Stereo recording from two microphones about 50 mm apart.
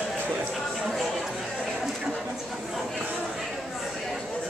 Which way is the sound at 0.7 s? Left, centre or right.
Centre.